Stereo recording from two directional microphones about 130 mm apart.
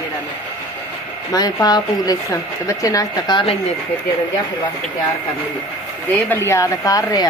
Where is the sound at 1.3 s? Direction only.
30° left (ahead or behind).